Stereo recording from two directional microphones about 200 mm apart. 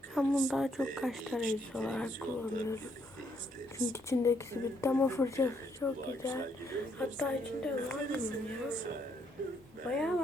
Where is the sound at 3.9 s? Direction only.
15° left (ahead or behind).